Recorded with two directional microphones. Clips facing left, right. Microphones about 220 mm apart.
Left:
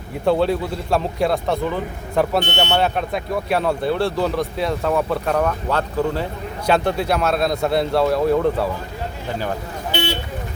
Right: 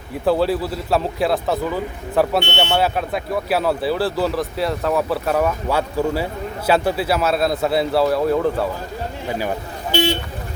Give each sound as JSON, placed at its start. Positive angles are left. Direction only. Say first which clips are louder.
{"t": 0.3, "sound": "speech", "louder": "even", "side_deg": -5}